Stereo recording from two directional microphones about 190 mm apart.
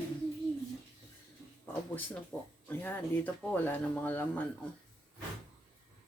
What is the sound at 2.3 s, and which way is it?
Speech, 15° left (ahead or behind).